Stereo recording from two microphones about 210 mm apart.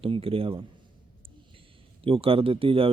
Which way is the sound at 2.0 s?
25° right (ahead or behind).